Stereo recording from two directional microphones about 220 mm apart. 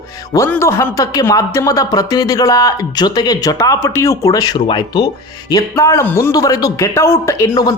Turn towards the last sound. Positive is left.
turn(degrees=15)  # may be behind; listen again after turning